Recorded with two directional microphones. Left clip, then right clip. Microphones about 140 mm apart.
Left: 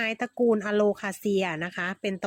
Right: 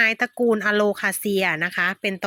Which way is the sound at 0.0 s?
10° right (ahead or behind).